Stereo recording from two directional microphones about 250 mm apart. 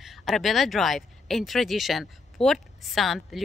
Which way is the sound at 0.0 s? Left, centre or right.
Centre.